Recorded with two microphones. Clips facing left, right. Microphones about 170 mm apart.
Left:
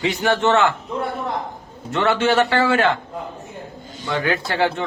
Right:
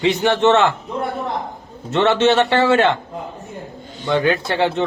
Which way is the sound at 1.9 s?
25° right (ahead or behind).